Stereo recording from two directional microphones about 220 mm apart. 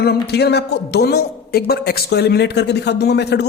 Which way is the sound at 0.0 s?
50° left (ahead or behind).